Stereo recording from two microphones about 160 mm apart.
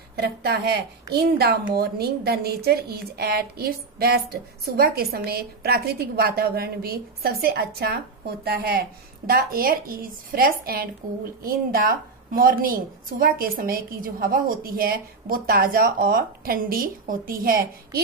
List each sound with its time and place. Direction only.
0.1 s a woman's voice: 90° right; by 18.0 s 70° right (ahead or behind)